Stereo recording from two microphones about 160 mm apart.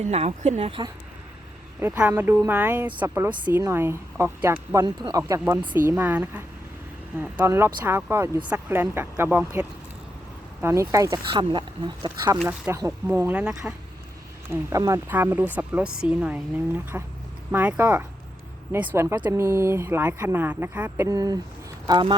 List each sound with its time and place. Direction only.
0.0 s speech: 45° right (ahead or behind)
1.8 s speech: 10° right (ahead or behind)
7.4 s speech: 15° right (ahead or behind)
12.5 s speech: 10° right (ahead or behind)
14.5 s speech: 20° right (ahead or behind)